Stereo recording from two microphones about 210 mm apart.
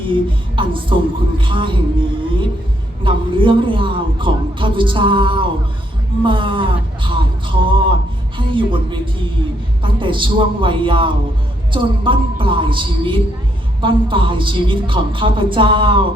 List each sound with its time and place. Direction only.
0.0 s a man's voice: 25° right (ahead or behind)
3.0 s a man's voice: 25° right (ahead or behind)